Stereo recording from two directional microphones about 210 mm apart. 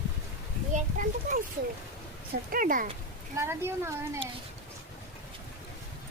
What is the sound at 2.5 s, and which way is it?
Speech, 40° right (ahead or behind).